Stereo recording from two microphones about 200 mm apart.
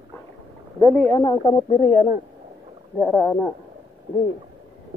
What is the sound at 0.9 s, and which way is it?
Speech, 5° left (ahead or behind).